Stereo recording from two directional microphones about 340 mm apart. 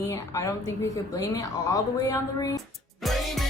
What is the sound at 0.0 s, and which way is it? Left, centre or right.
A woman's voice, centre.